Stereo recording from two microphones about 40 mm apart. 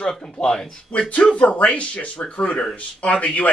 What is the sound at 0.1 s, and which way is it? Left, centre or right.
Speech, centre.